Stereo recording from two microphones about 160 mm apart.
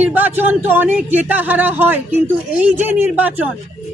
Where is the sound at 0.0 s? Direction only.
10° right (ahead or behind).